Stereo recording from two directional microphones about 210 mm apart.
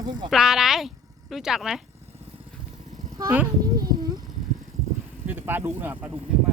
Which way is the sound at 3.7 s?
20° right (ahead or behind).